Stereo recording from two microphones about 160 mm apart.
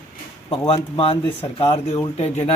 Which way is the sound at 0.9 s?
35° left (ahead or behind).